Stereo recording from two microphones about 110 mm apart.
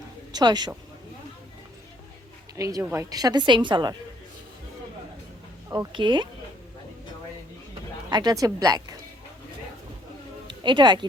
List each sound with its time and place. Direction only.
0.3 s a woman's voice: 40° right (ahead or behind)
2.6 s a woman's voice: 30° right (ahead or behind)
5.6 s speech: 30° right (ahead or behind)
5.9 s speech: 45° right (ahead or behind)
8.1 s a woman's voice: 35° right (ahead or behind)
10.4 s a sound: 45° right (ahead or behind)